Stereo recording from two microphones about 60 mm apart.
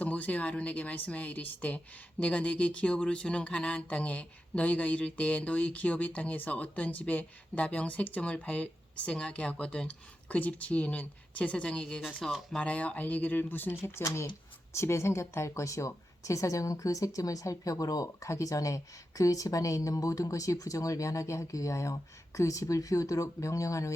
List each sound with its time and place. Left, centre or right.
0.0 s speech: left
12.2 s speech: centre
12.5 s speech: left
14.7 s speech: left